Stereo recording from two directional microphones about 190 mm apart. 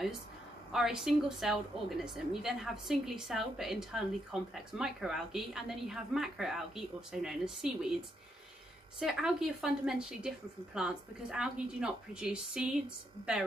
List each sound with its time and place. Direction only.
0.7 s a woman's voice: centre (ahead or behind)
9.0 s a woman's voice: 5° right (ahead or behind)